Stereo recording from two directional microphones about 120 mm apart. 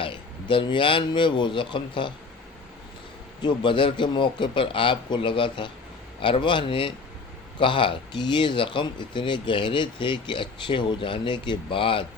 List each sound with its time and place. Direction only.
0.0 s speech: 45° left (ahead or behind)
3.4 s speech: 40° left (ahead or behind)